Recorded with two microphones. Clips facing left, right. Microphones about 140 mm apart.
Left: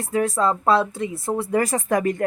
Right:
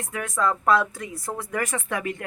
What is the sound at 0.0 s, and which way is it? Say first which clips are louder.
A woman's voice: left 5 dB; 35° left (ahead or behind).